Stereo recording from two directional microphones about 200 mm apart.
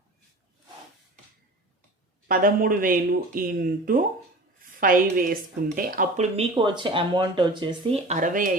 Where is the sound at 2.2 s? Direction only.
45° right (ahead or behind).